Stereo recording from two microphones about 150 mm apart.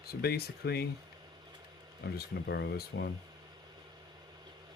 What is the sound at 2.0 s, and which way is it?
Speech, 90° left.